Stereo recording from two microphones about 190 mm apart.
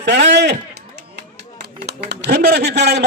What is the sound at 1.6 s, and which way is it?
A man's voice, 60° right (ahead or behind).